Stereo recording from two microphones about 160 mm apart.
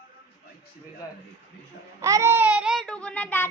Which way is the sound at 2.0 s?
20° right (ahead or behind).